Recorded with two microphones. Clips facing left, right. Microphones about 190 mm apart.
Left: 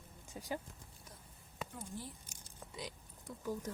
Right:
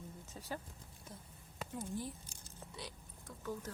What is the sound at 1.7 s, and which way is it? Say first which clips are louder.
Speech: right 8 dB; 15° right (ahead or behind).